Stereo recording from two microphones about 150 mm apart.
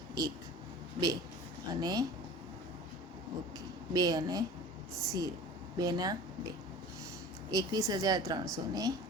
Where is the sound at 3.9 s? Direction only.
25° right (ahead or behind).